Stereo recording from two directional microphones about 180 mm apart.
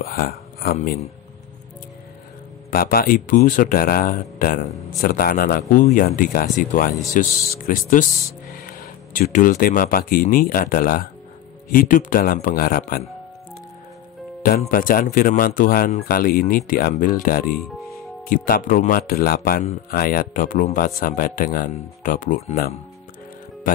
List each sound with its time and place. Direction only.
0.0 s speech: 55° left (ahead or behind)
2.7 s speech: 55° left (ahead or behind)
14.7 s speech: 50° left (ahead or behind)